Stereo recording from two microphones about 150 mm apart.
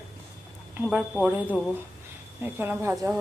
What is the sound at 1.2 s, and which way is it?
A woman's voice, 10° right (ahead or behind).